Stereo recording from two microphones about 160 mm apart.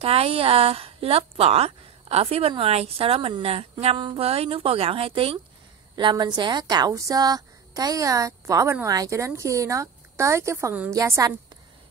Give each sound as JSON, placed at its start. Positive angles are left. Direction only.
{"t": 0.0, "sound": "a woman's voice", "side_deg": -40}